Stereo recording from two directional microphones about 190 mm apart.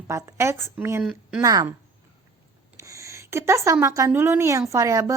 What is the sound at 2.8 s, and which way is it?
A woman's voice, 15° right (ahead or behind).